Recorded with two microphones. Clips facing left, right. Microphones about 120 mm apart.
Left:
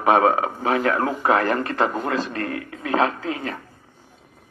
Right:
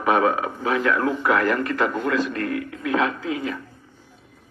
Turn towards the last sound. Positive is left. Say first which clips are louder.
# right 1 dB
turn(degrees=35)  # may be behind; listen again after turning